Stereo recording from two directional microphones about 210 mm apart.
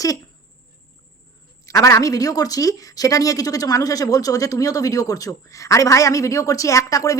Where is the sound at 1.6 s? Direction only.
15° left (ahead or behind).